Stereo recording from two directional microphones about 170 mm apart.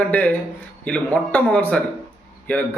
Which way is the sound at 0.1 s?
10° left (ahead or behind).